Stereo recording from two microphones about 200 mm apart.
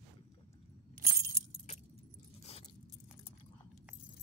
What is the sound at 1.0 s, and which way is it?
Keys jangling, 45° right (ahead or behind).